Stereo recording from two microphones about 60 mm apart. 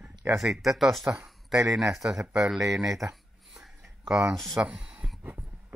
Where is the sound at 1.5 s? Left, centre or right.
Right.